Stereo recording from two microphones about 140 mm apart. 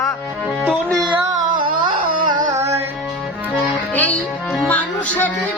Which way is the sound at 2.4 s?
20° right (ahead or behind).